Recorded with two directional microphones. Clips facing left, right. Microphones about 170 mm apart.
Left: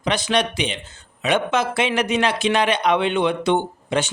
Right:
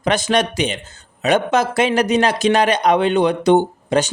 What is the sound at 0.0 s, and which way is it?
A man's voice, 45° right (ahead or behind).